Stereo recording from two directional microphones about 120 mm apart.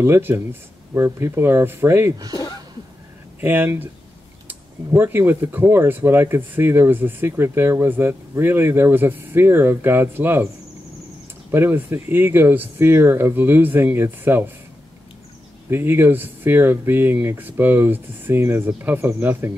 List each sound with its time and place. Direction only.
0.0 s speech: 20° right (ahead or behind)
3.3 s speech: 15° right (ahead or behind)
11.5 s speech: 20° right (ahead or behind)
15.7 s speech: 20° right (ahead or behind)